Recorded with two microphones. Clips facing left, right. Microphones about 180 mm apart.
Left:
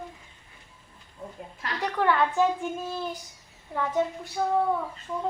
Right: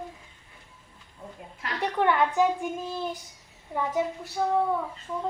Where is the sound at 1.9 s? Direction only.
20° right (ahead or behind).